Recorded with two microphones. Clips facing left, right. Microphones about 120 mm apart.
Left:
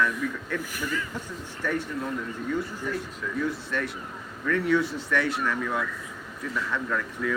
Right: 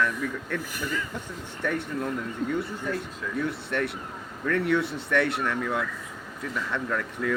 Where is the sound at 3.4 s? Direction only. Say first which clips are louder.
Right 2 dB; 65° right (ahead or behind).